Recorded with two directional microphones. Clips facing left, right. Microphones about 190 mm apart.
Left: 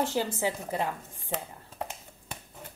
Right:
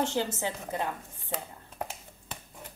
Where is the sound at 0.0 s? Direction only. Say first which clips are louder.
Left 1 dB; 10° left (ahead or behind).